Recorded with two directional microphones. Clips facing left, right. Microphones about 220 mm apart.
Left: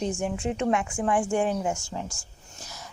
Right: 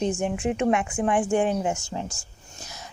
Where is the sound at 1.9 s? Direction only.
20° right (ahead or behind).